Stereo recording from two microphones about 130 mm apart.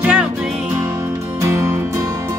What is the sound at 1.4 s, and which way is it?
Music, 20° right (ahead or behind).